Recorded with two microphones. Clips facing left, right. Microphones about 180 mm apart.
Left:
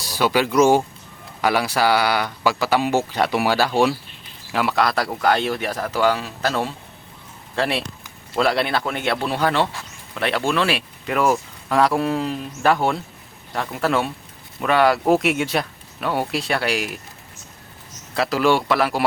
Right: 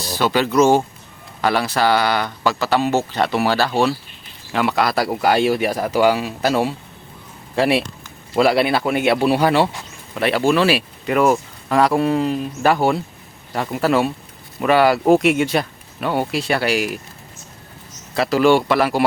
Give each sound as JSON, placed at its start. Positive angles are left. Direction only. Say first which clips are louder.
{"t": 0.0, "sound": "speech", "louder": "right 1 dB", "side_deg": 10}
{"t": 4.5, "sound": "speech", "louder": "right 2 dB", "side_deg": 0}
{"t": 18.1, "sound": "speech", "louder": "right 4 dB", "side_deg": 0}